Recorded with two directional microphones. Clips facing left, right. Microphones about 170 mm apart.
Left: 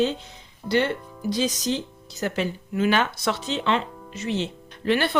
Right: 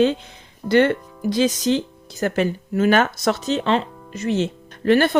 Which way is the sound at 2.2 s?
50° right (ahead or behind).